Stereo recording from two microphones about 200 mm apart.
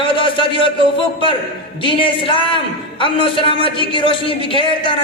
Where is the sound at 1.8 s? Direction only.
25° left (ahead or behind).